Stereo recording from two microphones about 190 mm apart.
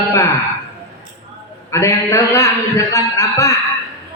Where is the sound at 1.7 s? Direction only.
15° left (ahead or behind).